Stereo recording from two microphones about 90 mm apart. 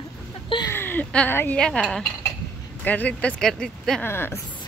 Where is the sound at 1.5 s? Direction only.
10° left (ahead or behind).